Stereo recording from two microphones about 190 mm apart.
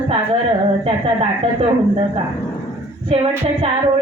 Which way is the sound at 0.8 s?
30° right (ahead or behind).